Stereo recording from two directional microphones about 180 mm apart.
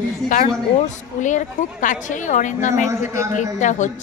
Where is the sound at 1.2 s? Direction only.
45° left (ahead or behind).